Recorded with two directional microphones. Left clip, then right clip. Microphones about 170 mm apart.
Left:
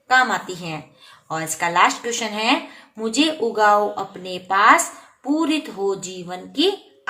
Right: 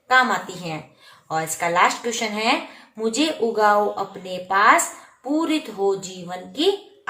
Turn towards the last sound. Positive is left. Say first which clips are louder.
# left 1 dB
turn(degrees=30)  # may be behind; listen again after turning